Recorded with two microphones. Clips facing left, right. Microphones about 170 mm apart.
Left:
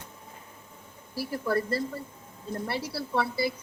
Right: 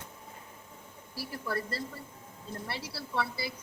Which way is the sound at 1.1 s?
50° left (ahead or behind).